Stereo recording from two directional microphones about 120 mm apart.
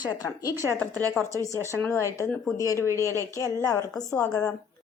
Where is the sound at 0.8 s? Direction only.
15° left (ahead or behind).